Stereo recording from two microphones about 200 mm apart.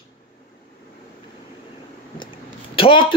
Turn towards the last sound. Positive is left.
turn(degrees=25)  # may be behind; listen again after turning